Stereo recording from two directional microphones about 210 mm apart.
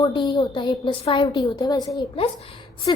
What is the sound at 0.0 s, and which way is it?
A woman's voice, 20° left (ahead or behind).